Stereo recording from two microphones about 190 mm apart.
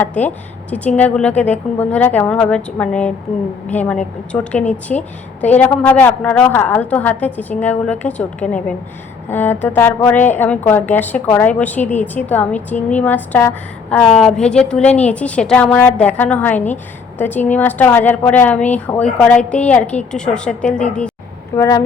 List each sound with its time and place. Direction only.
0.0 s a woman's voice: 10° left (ahead or behind)